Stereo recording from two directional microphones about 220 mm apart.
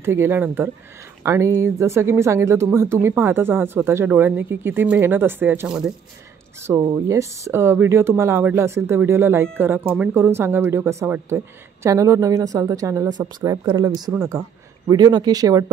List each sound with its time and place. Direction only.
0.0 s speech: 10° right (ahead or behind)